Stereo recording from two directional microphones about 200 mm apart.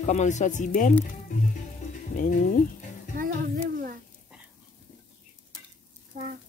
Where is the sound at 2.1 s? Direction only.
40° left (ahead or behind).